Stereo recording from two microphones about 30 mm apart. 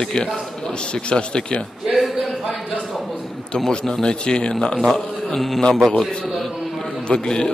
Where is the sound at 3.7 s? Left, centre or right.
Left.